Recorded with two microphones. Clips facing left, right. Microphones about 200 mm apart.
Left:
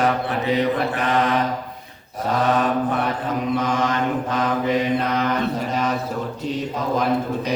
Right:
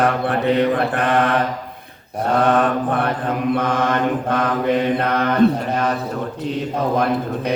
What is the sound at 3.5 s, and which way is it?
Mantra, 60° right (ahead or behind).